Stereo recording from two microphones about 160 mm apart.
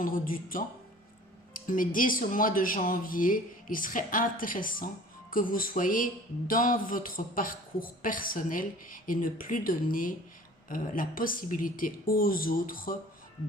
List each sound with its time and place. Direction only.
0.0 s a woman's voice: 60° left (ahead or behind)